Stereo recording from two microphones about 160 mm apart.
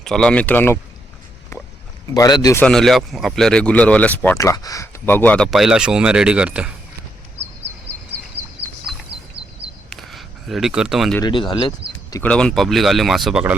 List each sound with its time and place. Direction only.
0.0 s speech: 5° left (ahead or behind)
2.1 s speech: 25° left (ahead or behind)
2.6 s speech: 5° left (ahead or behind)
4.4 s speech: 20° left (ahead or behind); by 6.7 s 5° right (ahead or behind)
9.9 s a sound: centre (ahead or behind)
11.2 s speech: 30° left (ahead or behind)
12.2 s speech: 5° left (ahead or behind)